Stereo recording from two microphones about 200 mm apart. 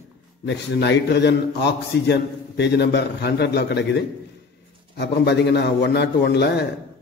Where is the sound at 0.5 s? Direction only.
60° left (ahead or behind).